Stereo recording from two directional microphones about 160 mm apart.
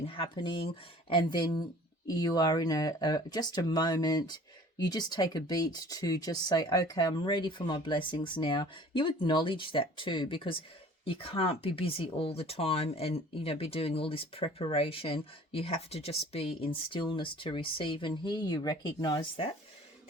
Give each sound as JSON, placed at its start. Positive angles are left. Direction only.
{"t": 0.1, "sound": "speech", "side_deg": 35}